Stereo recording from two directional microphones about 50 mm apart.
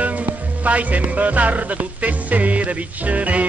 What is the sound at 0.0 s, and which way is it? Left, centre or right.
Music, right.